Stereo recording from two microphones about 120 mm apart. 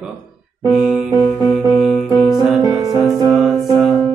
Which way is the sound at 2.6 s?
30° right (ahead or behind).